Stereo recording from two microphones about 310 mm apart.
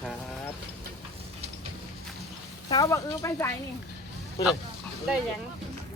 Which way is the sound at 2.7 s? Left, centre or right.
Centre.